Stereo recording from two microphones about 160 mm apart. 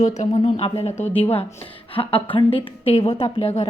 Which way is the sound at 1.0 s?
10° left (ahead or behind).